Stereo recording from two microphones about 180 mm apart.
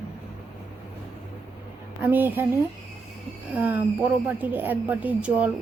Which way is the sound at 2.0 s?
10° right (ahead or behind).